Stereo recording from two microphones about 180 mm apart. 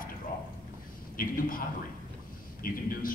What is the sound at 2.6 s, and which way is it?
Speech, 50° left (ahead or behind).